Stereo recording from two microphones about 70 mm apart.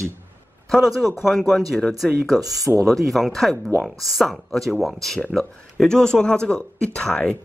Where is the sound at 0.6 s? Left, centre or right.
Centre.